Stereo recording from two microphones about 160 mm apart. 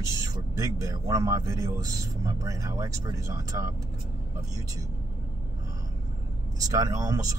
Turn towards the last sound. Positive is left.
turn(degrees=-20)  # may be behind; listen again after turning